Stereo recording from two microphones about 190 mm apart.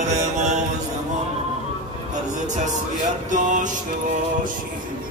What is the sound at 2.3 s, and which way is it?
A man's voice, 40° right (ahead or behind).